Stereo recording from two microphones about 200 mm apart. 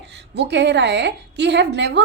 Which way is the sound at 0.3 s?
60° right (ahead or behind).